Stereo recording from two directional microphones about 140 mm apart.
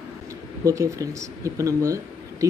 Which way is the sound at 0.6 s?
20° right (ahead or behind).